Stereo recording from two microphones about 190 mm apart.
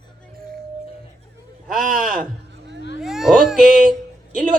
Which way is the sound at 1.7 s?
45° right (ahead or behind).